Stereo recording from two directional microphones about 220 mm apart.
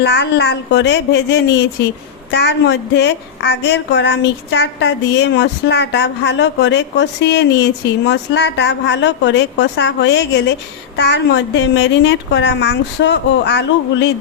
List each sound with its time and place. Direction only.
0.0 s a woman's voice: 50° left (ahead or behind)